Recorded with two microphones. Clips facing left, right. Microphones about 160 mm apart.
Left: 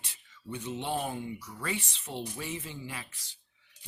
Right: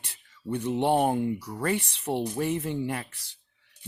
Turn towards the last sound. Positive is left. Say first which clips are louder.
# right 10 dB
turn(degrees=-65)  # may be behind; listen again after turning